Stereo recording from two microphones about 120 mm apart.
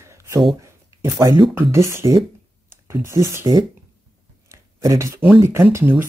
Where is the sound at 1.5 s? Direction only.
20° right (ahead or behind).